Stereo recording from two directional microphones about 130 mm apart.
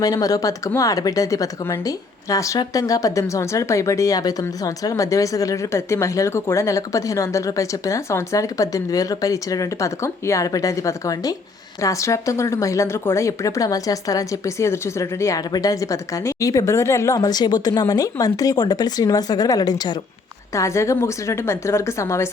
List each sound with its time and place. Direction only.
0.0 s speech: 30° left (ahead or behind)